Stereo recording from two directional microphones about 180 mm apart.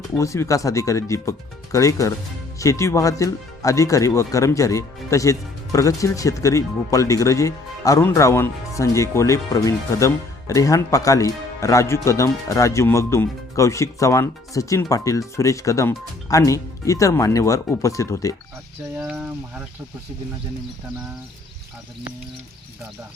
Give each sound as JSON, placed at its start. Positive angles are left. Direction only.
{"t": 0.2, "sound": "speech", "side_deg": 15}
{"t": 18.9, "sound": "speech", "side_deg": -5}